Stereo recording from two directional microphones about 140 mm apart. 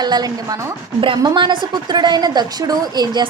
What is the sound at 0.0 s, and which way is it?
A woman's voice, 30° right (ahead or behind).